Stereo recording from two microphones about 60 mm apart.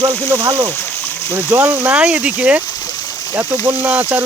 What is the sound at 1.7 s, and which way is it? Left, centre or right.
Speech, right.